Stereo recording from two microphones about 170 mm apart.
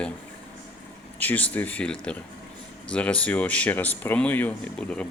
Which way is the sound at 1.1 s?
10° left (ahead or behind).